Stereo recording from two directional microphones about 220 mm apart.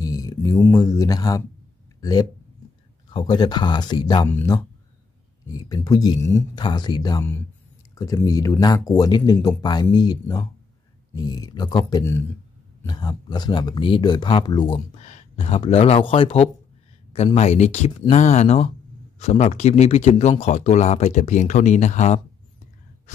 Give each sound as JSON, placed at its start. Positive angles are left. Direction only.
{"t": 0.0, "sound": "speech", "side_deg": 15}
{"t": 2.0, "sound": "a sound", "side_deg": 15}
{"t": 3.1, "sound": "speech", "side_deg": 20}